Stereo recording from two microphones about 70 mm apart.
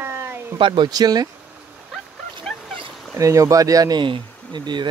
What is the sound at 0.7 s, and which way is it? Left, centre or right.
Speech, right.